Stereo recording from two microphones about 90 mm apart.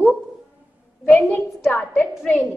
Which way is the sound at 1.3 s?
20° left (ahead or behind).